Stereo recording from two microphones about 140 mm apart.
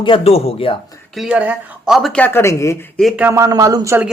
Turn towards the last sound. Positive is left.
turn(degrees=-25)  # may be behind; listen again after turning